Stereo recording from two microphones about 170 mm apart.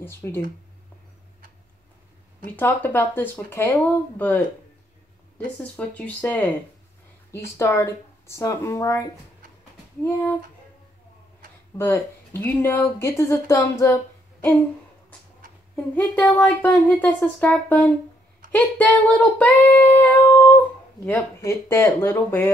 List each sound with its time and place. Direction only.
0.0 s speech: 15° left (ahead or behind)
2.5 s speech: 10° left (ahead or behind)
5.6 s speech: 10° left (ahead or behind)
7.5 s speech: 15° left (ahead or behind)
11.8 s speech: 15° left (ahead or behind)
15.7 s speech: 10° left (ahead or behind)